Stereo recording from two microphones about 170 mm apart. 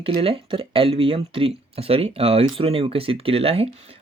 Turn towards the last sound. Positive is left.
turn(degrees=-35)  # may be behind; listen again after turning